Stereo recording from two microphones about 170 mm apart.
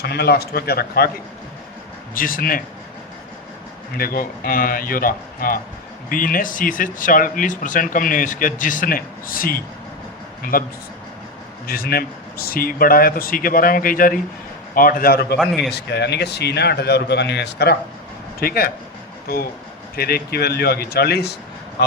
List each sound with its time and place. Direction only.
0.0 s speech: 70° left (ahead or behind)
2.1 s speech: 55° left (ahead or behind)
3.9 s speech: 60° left (ahead or behind)
15.4 s a man's voice: centre (ahead or behind)
15.7 s speech: 80° left
18.3 s speech: 60° left (ahead or behind)
20.0 s speech: 65° left (ahead or behind)